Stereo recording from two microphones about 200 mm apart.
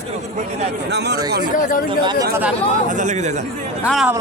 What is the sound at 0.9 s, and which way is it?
Speech, 55° right (ahead or behind).